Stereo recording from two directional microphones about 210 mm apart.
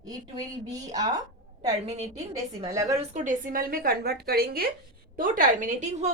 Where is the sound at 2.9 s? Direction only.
35° right (ahead or behind).